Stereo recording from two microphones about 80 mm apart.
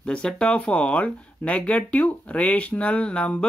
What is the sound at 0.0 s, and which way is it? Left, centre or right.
Speech, centre.